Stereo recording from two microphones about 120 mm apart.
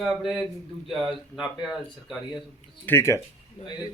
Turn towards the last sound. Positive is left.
turn(degrees=20)  # may be behind; listen again after turning